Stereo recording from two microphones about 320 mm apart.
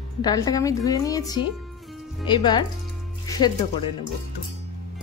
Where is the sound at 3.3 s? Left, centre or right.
Centre.